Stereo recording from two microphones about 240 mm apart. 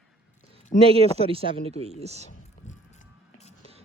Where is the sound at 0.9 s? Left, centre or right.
Right.